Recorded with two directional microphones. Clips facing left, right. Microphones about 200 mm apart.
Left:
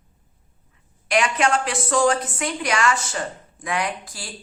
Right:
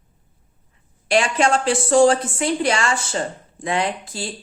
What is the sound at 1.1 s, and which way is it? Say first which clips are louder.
Speech: right 3 dB; 30° right (ahead or behind).